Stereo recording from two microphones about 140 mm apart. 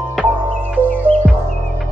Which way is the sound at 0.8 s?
10° left (ahead or behind).